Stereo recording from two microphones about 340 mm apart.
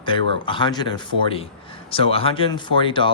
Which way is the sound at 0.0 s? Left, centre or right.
Centre.